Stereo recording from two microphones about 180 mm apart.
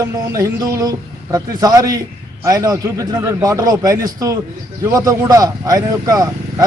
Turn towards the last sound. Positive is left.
turn(degrees=-20)  # may be behind; listen again after turning